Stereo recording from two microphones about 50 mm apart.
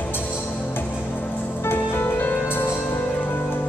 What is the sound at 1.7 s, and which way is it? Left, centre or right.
Music, left.